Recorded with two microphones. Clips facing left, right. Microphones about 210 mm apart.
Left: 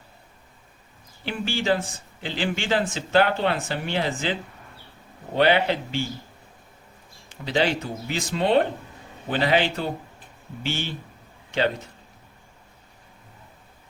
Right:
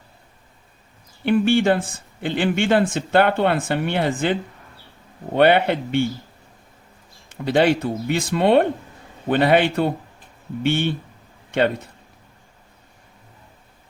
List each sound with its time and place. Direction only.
1.2 s speech: 55° right (ahead or behind)
7.4 s speech: 55° right (ahead or behind)